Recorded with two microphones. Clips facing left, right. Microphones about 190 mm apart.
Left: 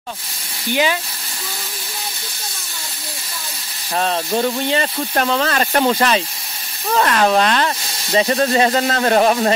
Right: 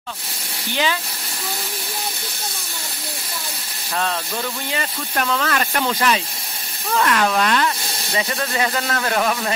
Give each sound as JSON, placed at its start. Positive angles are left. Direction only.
{"t": 3.9, "sound": "speech", "side_deg": 25}